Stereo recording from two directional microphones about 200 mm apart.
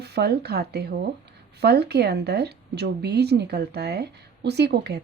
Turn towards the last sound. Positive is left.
turn(degrees=-55)  # may be behind; listen again after turning